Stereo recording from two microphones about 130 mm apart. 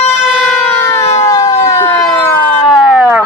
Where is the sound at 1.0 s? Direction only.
55° left (ahead or behind).